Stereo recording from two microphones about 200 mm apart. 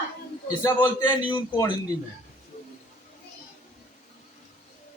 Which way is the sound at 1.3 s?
20° left (ahead or behind).